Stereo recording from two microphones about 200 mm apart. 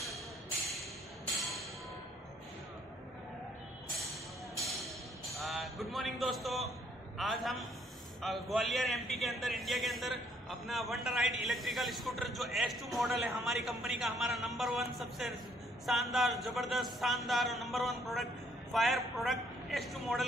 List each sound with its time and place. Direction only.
5.4 s speech: centre (ahead or behind)